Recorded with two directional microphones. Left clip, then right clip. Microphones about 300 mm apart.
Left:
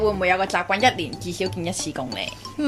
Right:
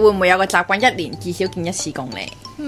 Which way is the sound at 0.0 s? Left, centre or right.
Right.